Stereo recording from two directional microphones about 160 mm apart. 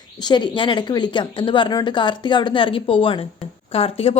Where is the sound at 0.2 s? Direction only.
25° left (ahead or behind).